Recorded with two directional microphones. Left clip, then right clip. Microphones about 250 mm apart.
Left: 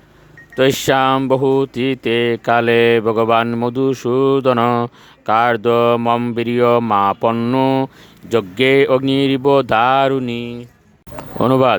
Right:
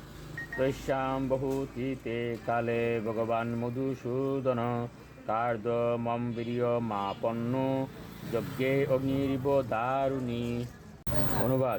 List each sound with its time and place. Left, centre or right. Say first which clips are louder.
0.6 s speech: left 17 dB; left